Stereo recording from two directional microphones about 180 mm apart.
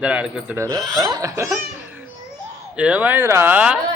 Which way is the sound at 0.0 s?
5° right (ahead or behind).